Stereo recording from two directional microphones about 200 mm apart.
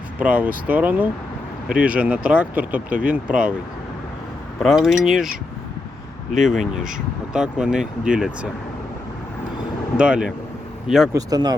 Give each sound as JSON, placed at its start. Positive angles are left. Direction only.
{"t": 0.2, "sound": "speech", "side_deg": -5}
{"t": 4.6, "sound": "speech", "side_deg": 0}
{"t": 6.4, "sound": "speech", "side_deg": 0}
{"t": 10.0, "sound": "speech", "side_deg": -5}
{"t": 11.1, "sound": "speech", "side_deg": -20}